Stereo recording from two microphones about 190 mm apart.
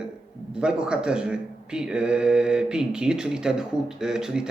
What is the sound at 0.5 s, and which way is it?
Speech, 5° right (ahead or behind).